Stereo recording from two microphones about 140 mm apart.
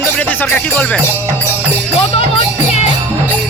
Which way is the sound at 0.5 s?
10° left (ahead or behind).